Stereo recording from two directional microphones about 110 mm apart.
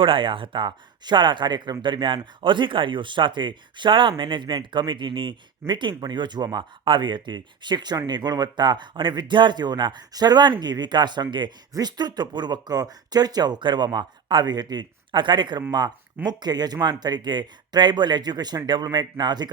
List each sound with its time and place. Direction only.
0.0 s speech: 50° right (ahead or behind)